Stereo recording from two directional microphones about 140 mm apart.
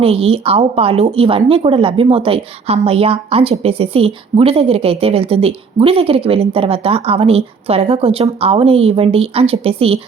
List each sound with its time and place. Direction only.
0.0 s speech: 45° right (ahead or behind)